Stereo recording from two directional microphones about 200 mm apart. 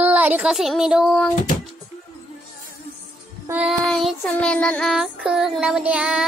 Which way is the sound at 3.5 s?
5° right (ahead or behind).